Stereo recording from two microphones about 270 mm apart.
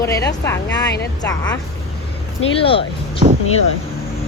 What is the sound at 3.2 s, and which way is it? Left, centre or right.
Speech, right.